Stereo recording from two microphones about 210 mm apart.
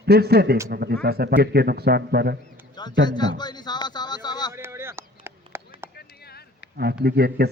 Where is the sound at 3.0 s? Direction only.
20° left (ahead or behind).